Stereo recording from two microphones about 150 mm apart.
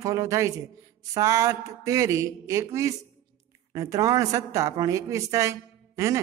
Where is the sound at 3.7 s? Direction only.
25° right (ahead or behind).